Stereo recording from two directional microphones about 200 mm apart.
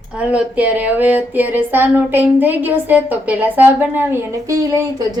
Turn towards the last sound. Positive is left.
turn(degrees=-15)  # may be behind; listen again after turning